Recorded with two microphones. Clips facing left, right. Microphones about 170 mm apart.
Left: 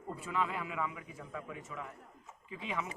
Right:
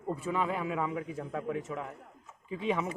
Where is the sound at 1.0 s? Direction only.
45° right (ahead or behind).